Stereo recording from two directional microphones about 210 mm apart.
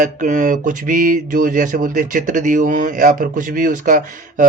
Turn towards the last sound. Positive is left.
turn(degrees=-40)  # may be behind; listen again after turning